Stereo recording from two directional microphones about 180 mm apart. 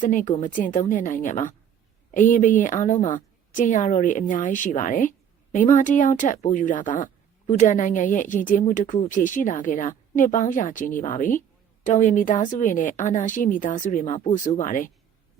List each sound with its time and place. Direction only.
0.0 s a woman's voice: 45° left (ahead or behind)